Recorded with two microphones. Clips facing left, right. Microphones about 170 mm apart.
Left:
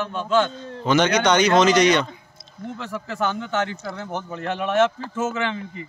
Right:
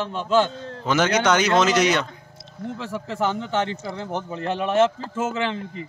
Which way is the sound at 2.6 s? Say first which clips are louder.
Right 2 dB; 75° right (ahead or behind).